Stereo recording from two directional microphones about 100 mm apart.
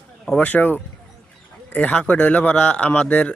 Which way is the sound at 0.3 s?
15° left (ahead or behind).